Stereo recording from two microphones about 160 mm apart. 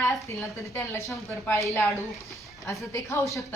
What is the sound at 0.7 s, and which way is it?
Speech, 15° left (ahead or behind).